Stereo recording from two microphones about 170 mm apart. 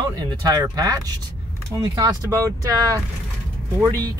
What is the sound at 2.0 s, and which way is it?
Speech, 20° right (ahead or behind).